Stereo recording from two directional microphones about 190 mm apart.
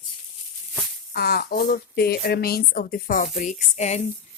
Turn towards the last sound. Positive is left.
turn(degrees=35)  # may be behind; listen again after turning